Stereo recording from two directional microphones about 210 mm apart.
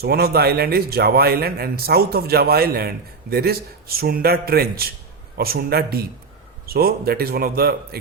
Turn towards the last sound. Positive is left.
turn(degrees=-45)  # may be behind; listen again after turning